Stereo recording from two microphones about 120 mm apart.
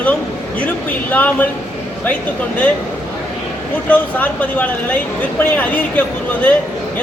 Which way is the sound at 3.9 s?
15° left (ahead or behind).